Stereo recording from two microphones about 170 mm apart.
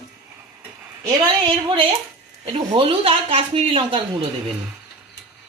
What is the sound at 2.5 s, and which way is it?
A woman's voice, 30° right (ahead or behind).